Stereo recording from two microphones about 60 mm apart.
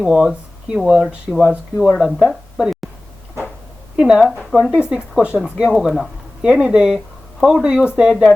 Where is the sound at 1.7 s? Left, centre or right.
Centre.